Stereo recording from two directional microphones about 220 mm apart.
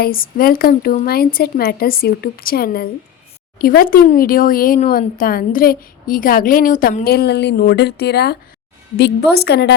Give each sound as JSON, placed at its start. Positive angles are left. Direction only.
{"t": 0.0, "sound": "a woman's voice", "side_deg": 40}